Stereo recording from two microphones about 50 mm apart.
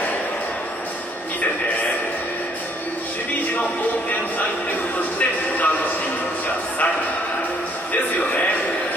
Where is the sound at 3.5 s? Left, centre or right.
Left.